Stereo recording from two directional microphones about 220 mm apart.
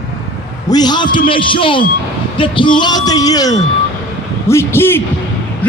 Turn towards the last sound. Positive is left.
turn(degrees=10)  # may be behind; listen again after turning